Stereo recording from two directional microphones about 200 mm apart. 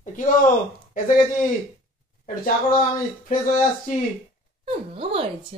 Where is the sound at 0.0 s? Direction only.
40° left (ahead or behind).